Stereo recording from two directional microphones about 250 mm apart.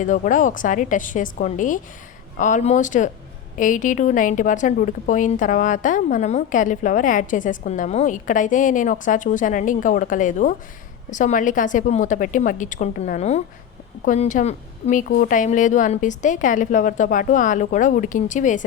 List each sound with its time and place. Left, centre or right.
0.0 s a woman's voice: left